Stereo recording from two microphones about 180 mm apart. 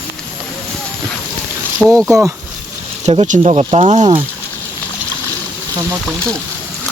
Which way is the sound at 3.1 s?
35° right (ahead or behind).